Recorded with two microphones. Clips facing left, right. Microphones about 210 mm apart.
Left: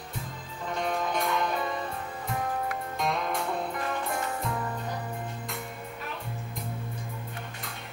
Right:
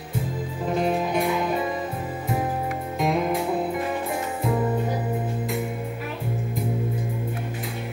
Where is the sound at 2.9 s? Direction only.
5° right (ahead or behind).